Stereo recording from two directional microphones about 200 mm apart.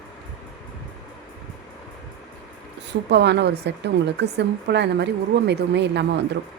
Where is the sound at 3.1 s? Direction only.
60° right (ahead or behind).